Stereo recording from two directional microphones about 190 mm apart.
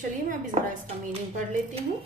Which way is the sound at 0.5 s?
35° right (ahead or behind).